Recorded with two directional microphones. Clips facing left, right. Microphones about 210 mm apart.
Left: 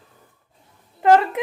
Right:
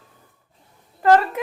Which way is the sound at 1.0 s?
15° left (ahead or behind).